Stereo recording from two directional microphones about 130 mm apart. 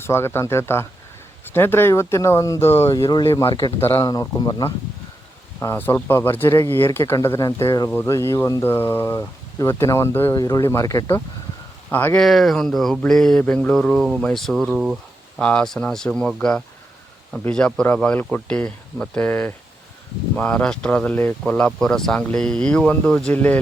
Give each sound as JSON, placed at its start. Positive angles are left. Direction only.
{"t": 0.0, "sound": "speech", "side_deg": 20}
{"t": 4.0, "sound": "speech", "side_deg": 30}
{"t": 5.5, "sound": "speech", "side_deg": 15}
{"t": 11.9, "sound": "speech", "side_deg": 15}
{"t": 12.2, "sound": "speech", "side_deg": 0}
{"t": 15.4, "sound": "speech", "side_deg": 5}